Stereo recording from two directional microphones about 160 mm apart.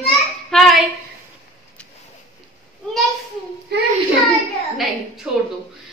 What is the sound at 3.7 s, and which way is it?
Child singing, 90° right.